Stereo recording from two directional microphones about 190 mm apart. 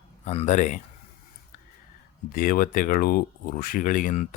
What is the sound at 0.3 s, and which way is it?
Speech, 35° left (ahead or behind).